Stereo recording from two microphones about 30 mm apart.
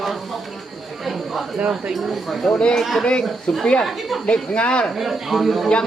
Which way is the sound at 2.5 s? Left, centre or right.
Left.